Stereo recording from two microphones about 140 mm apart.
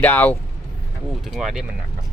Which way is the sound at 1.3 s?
Centre (ahead or behind).